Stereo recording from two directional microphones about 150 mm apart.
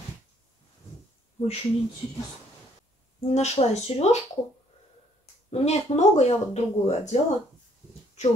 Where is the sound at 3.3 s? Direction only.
45° left (ahead or behind).